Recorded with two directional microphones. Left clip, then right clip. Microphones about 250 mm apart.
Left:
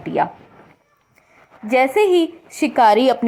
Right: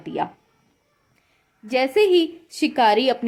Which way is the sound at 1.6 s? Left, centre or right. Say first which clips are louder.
Left 3 dB; centre.